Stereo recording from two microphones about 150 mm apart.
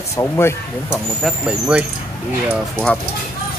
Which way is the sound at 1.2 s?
5° right (ahead or behind).